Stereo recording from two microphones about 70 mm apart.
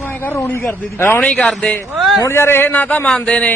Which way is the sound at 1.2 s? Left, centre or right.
Centre.